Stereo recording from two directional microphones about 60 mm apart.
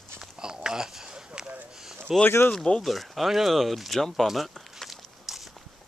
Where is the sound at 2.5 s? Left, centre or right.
Centre.